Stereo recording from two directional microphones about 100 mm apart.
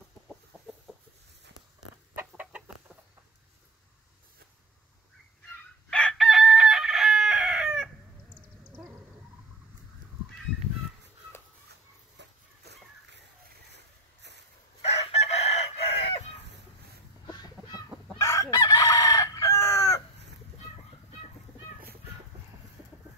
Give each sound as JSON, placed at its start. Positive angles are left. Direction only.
{"t": 0.9, "sound": "a sound", "side_deg": 5}
{"t": 5.9, "sound": "chicken", "side_deg": 10}
{"t": 8.3, "sound": "cat", "side_deg": -20}
{"t": 14.9, "sound": "chicken", "side_deg": 90}
{"t": 17.3, "sound": "chicken", "side_deg": 40}